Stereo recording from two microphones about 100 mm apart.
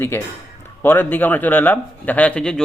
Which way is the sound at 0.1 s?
20° left (ahead or behind).